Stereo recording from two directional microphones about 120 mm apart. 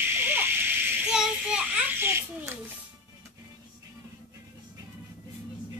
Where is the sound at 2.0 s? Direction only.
20° right (ahead or behind).